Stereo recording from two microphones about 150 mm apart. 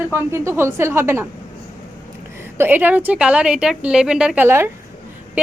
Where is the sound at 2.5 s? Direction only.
15° right (ahead or behind).